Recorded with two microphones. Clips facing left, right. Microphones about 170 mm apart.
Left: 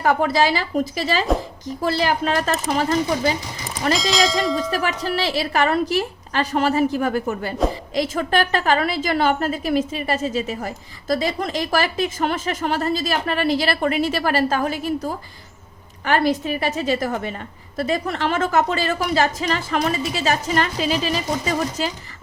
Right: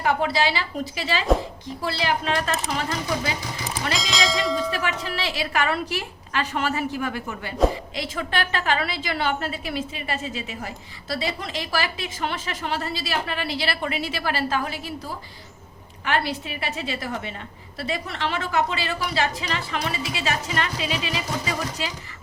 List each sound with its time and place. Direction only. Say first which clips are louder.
0.0 s a woman's voice: left 4 dB; 45° left (ahead or behind)
3.9 s speech: left 5 dB; centre (ahead or behind)
4.7 s a woman's voice: left 5 dB; 40° left (ahead or behind)